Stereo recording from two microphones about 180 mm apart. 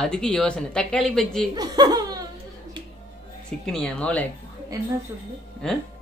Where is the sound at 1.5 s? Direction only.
20° right (ahead or behind).